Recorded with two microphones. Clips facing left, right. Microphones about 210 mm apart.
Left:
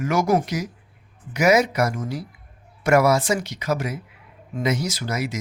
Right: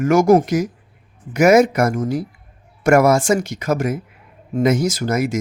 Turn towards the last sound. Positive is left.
turn(degrees=-50)  # may be behind; listen again after turning